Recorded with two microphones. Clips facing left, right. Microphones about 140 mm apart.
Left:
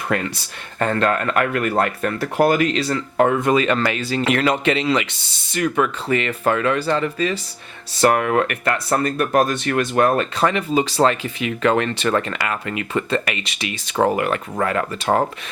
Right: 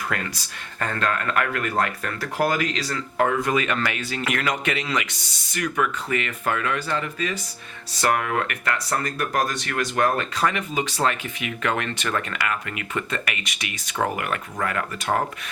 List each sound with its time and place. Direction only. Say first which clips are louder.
0.8 s speech: left 7 dB; 25° left (ahead or behind)
8.4 s speech: left 5 dB; 25° left (ahead or behind)